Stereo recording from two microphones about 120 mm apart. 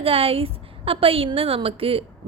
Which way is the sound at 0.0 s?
50° right (ahead or behind).